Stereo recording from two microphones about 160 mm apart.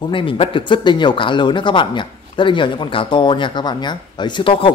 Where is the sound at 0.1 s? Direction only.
30° left (ahead or behind).